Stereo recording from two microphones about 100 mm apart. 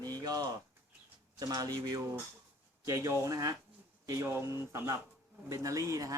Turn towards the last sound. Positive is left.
turn(degrees=-35)  # may be behind; listen again after turning